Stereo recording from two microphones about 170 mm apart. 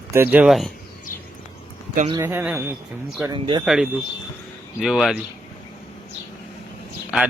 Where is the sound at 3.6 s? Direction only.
Centre (ahead or behind).